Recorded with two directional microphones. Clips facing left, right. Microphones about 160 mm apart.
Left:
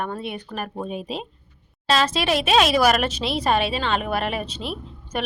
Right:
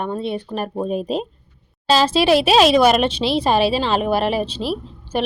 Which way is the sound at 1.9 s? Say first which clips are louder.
Right 7 dB; 30° right (ahead or behind).